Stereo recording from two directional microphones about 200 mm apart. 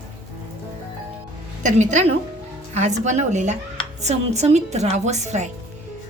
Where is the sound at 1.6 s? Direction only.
35° right (ahead or behind).